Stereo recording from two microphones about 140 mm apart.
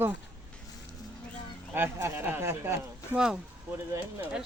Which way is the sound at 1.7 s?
15° right (ahead or behind).